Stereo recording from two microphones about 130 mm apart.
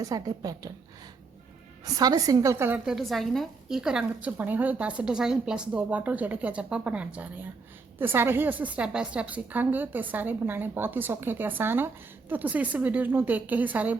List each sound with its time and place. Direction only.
0.0 s speech: 30° right (ahead or behind)
1.8 s a woman's voice: 30° right (ahead or behind); by 13.9 s 10° right (ahead or behind)